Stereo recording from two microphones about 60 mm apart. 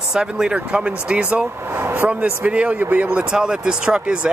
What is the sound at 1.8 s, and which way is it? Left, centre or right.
Speech, right.